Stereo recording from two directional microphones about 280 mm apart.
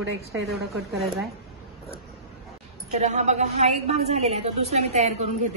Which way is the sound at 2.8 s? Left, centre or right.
Right.